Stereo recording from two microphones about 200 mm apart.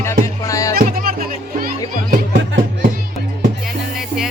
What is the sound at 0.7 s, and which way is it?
Music, 50° right (ahead or behind).